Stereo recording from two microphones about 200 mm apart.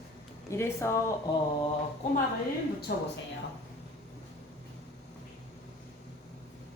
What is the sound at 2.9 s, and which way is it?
Speech, 50° left (ahead or behind).